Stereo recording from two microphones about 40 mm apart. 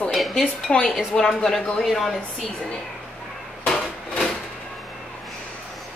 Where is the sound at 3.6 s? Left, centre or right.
Centre.